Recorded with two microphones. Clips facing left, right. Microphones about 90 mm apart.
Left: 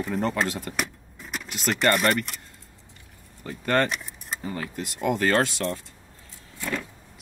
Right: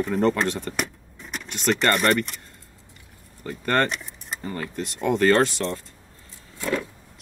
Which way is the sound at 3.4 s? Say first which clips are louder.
Right 1 dB; 5° left (ahead or behind).